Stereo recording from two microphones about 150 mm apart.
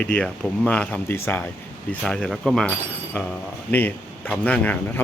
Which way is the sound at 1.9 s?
5° left (ahead or behind).